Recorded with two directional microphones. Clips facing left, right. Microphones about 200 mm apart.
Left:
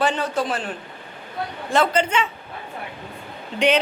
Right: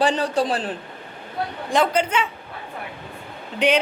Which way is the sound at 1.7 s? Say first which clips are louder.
Even; 15° right (ahead or behind).